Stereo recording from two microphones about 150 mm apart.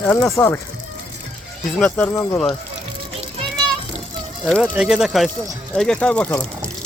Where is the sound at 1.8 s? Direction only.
10° left (ahead or behind).